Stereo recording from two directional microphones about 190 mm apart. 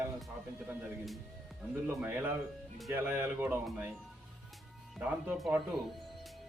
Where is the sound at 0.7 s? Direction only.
Centre (ahead or behind).